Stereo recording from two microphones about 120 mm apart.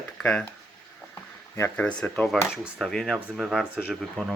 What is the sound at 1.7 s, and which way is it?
Speech, 10° left (ahead or behind).